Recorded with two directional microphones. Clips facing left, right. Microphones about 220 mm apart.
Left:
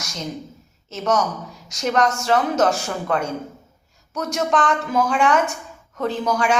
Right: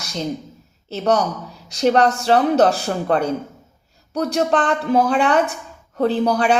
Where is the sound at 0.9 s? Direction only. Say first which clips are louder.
Right 3 dB; 35° right (ahead or behind).